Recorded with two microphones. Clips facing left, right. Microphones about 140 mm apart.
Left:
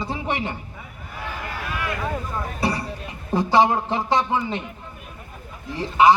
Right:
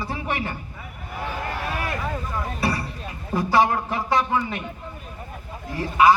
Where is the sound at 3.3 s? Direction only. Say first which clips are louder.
Left 2 dB; 25° left (ahead or behind).